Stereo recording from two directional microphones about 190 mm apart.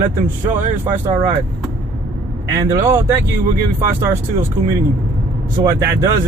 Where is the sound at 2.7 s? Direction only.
15° right (ahead or behind).